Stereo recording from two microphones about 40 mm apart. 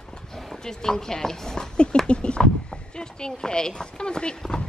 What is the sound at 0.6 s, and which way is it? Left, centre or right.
Speech, centre.